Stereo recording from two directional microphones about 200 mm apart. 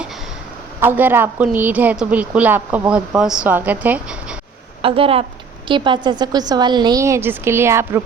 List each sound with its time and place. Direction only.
0.8 s a woman's voice: 10° right (ahead or behind)
4.8 s a woman's voice: 25° right (ahead or behind)